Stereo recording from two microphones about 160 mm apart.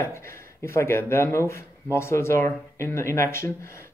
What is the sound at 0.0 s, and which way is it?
Speech, 15° left (ahead or behind).